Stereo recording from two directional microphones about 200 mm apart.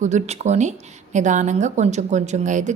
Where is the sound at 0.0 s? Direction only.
35° right (ahead or behind).